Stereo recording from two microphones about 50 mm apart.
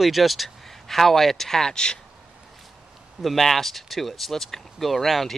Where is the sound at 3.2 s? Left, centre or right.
Centre.